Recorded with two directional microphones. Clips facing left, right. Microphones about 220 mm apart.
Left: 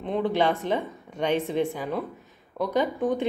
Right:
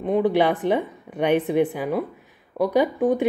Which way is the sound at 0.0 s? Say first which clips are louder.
Right 5 dB; 15° right (ahead or behind).